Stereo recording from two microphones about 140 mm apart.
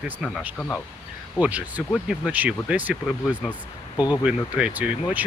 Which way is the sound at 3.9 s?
30° left (ahead or behind).